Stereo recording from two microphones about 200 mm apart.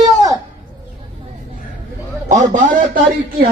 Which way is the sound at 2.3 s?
40° right (ahead or behind).